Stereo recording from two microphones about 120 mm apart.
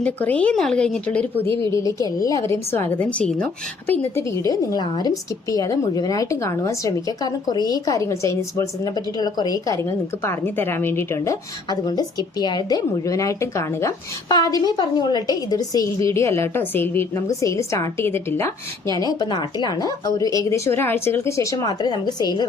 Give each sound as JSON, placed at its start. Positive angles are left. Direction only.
{"t": 0.0, "sound": "speech", "side_deg": 10}
{"t": 1.5, "sound": "a woman's voice", "side_deg": 25}
{"t": 10.2, "sound": "a woman's voice", "side_deg": 20}
{"t": 11.7, "sound": "a woman's voice", "side_deg": 35}